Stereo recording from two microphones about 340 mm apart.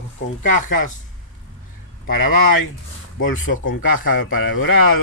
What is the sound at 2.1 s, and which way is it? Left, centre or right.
Speech, left.